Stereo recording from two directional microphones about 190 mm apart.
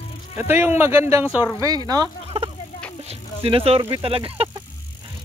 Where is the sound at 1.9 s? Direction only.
25° right (ahead or behind).